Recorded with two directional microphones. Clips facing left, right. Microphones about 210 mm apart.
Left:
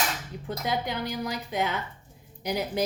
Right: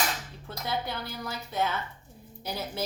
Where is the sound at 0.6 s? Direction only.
15° left (ahead or behind).